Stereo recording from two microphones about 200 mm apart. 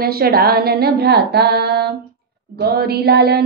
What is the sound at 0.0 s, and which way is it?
A woman's voice, 50° right (ahead or behind).